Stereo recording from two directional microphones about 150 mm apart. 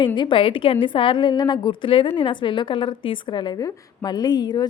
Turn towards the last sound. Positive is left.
turn(degrees=30)  # may be behind; listen again after turning